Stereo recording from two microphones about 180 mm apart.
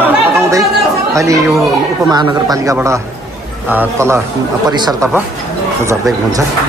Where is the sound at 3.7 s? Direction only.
15° right (ahead or behind).